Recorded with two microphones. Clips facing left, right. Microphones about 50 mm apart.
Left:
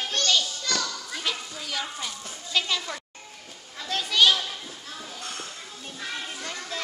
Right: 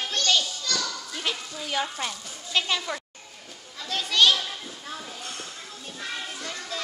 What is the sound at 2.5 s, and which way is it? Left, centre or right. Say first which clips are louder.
Speech: right 1 dB; centre.